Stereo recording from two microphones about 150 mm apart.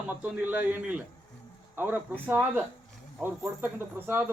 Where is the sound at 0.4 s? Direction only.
10° right (ahead or behind).